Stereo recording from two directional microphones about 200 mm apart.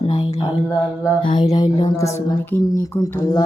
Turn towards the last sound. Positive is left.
turn(degrees=15)  # may be behind; listen again after turning